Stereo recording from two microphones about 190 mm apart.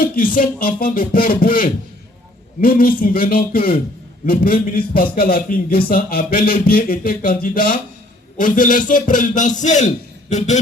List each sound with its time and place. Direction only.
0.0 s a man's voice: 50° left (ahead or behind)